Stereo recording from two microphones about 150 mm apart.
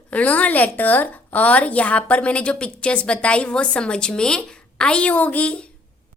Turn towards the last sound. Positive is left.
turn(degrees=10)  # may be behind; listen again after turning